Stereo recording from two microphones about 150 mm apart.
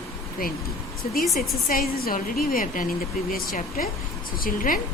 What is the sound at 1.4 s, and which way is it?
Speech, 75° left (ahead or behind).